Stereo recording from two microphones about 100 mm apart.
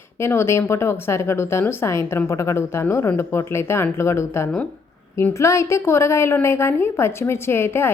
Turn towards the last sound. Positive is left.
turn(degrees=25)  # may be behind; listen again after turning